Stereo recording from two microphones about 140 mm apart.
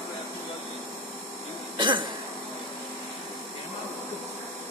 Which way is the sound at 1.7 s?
35° right (ahead or behind).